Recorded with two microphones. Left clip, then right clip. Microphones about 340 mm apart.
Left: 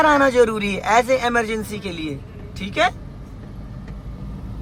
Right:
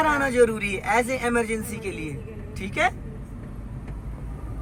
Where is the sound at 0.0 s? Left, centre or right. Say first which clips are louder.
Left 5 dB; centre.